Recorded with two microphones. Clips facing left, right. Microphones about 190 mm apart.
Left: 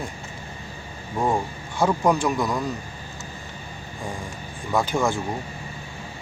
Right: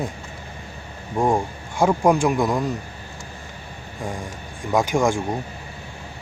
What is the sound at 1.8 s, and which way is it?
Speech, 20° right (ahead or behind).